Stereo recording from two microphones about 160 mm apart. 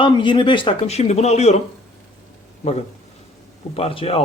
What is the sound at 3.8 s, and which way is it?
Speech, 35° left (ahead or behind).